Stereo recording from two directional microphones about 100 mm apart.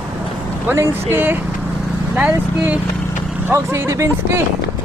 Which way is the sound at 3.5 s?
30° right (ahead or behind).